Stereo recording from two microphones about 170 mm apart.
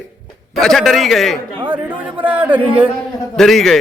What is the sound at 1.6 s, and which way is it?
Speech, 10° right (ahead or behind).